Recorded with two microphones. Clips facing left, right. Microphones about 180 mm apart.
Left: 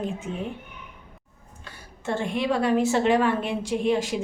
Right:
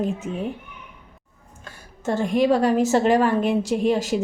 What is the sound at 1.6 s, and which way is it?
Speech, 40° right (ahead or behind).